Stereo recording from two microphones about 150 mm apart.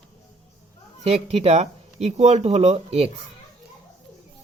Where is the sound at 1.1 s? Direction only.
45° right (ahead or behind).